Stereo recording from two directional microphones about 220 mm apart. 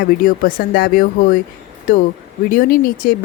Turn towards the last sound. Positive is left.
turn(degrees=40)  # may be behind; listen again after turning